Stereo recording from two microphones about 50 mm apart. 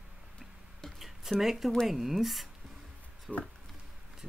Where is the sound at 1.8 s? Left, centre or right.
Centre.